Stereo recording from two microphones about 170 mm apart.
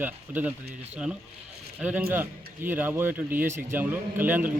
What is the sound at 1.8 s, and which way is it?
Speech, 10° right (ahead or behind).